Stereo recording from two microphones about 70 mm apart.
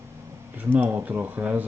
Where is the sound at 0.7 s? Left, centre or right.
Right.